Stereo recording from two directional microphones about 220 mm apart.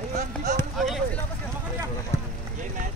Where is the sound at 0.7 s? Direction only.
Centre (ahead or behind).